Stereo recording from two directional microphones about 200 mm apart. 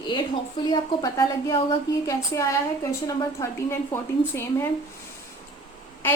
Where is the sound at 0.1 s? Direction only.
25° left (ahead or behind).